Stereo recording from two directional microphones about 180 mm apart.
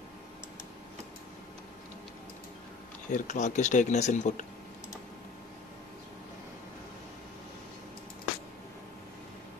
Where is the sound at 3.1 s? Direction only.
40° left (ahead or behind).